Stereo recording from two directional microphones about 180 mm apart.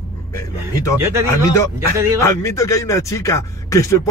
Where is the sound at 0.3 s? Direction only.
15° left (ahead or behind).